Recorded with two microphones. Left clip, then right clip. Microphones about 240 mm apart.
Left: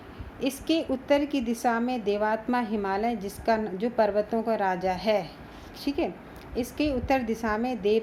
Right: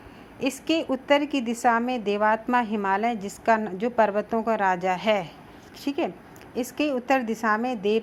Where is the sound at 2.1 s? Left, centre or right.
Right.